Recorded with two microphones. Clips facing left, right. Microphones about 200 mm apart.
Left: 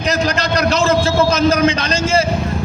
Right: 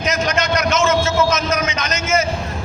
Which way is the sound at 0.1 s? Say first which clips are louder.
Left 2 dB; 35° left (ahead or behind).